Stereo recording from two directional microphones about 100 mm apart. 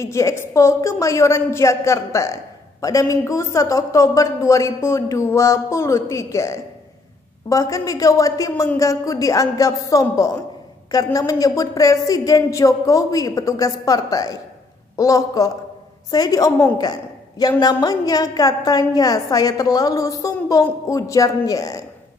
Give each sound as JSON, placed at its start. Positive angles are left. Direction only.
{"t": 0.0, "sound": "a woman's voice", "side_deg": 30}